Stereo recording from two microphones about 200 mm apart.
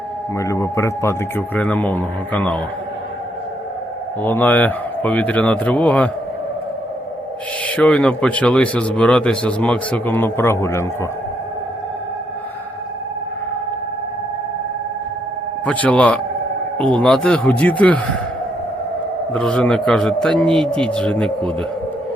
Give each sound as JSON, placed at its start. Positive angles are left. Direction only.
{"t": 0.3, "sound": "a man's voice", "side_deg": 15}
{"t": 4.2, "sound": "a man's voice", "side_deg": 10}
{"t": 7.8, "sound": "a man's voice", "side_deg": 5}
{"t": 15.6, "sound": "a man's voice", "side_deg": 5}
{"t": 19.3, "sound": "a man's voice", "side_deg": 5}